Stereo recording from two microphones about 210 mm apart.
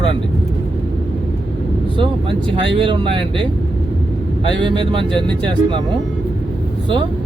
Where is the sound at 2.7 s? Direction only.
25° right (ahead or behind).